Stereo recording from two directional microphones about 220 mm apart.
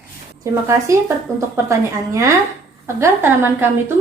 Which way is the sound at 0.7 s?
15° right (ahead or behind).